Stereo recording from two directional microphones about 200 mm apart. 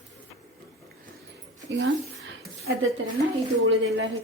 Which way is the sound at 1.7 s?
65° right (ahead or behind).